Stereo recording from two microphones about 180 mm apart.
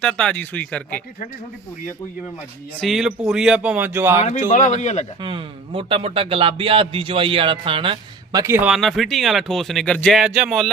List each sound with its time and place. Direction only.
0.0 s speech: 5° left (ahead or behind)
2.8 s speech: centre (ahead or behind)
4.3 s speech: 45° left (ahead or behind)
5.2 s a man's voice: 30° right (ahead or behind); by 10.7 s 5° right (ahead or behind)